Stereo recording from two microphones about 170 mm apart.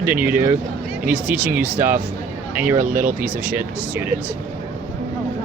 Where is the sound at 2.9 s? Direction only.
55° right (ahead or behind).